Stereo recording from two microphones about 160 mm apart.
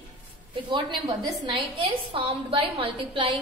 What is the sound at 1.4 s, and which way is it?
A woman's voice, 35° right (ahead or behind).